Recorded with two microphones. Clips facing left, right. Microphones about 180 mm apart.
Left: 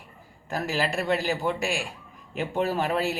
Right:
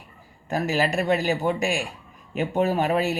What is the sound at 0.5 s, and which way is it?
Speech, 20° right (ahead or behind).